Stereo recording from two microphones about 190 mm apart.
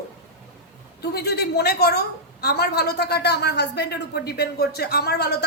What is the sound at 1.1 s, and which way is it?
A woman's voice, 55° left (ahead or behind).